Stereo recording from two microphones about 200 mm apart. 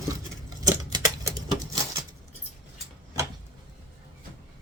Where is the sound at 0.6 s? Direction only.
20° right (ahead or behind).